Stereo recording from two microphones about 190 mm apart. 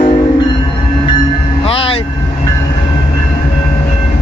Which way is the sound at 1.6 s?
30° left (ahead or behind).